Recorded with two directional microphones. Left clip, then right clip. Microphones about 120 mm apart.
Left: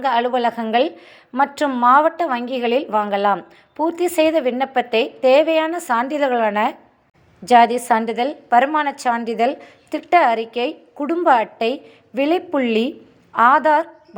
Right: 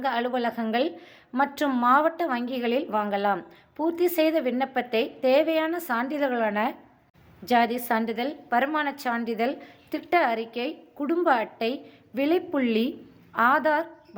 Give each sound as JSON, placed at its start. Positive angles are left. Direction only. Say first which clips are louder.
{"t": 0.0, "sound": "a woman's voice", "louder": "left 9 dB", "side_deg": 20}